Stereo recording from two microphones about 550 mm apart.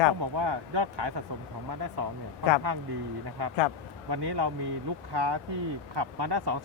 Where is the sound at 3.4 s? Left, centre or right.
Right.